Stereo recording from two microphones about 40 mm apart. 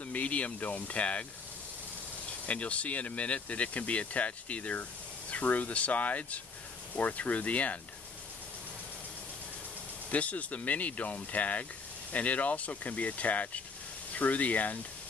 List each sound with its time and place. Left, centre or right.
0.1 s speech: left
2.4 s speech: left
10.1 s speech: left